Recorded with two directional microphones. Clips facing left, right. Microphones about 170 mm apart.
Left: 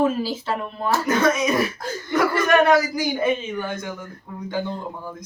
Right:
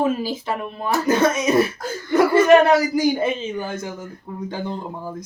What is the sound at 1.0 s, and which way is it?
A man's voice, 25° right (ahead or behind).